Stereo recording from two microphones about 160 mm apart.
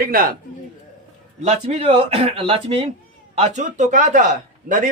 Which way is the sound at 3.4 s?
50° right (ahead or behind).